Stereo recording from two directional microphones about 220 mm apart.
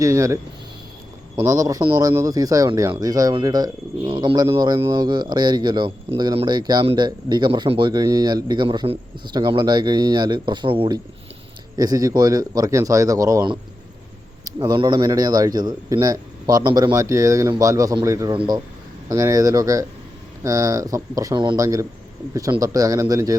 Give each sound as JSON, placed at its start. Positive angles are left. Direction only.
{"t": 0.0, "sound": "a man's voice", "side_deg": -15}
{"t": 1.4, "sound": "a man's voice", "side_deg": -15}
{"t": 14.6, "sound": "a man's voice", "side_deg": -20}